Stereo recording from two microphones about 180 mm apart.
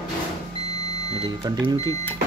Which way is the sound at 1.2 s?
25° right (ahead or behind).